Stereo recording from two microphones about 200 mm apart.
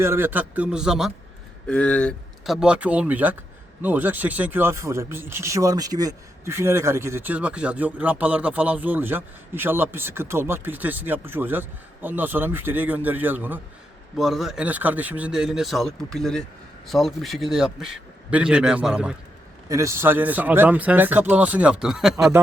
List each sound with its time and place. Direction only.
0.0 s a man's voice: 10° right (ahead or behind)